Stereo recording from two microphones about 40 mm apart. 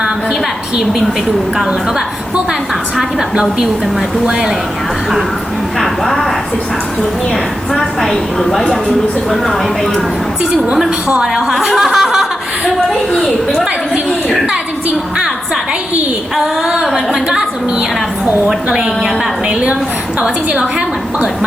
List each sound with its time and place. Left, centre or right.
3.0 s a woman's voice: centre
5.8 s a woman's voice: centre
7.7 s a woman's voice: centre
11.3 s a woman's voice: centre
11.9 s laughter: centre
13.1 s a woman's voice: centre
16.8 s a woman's voice: centre
18.7 s a woman's voice: centre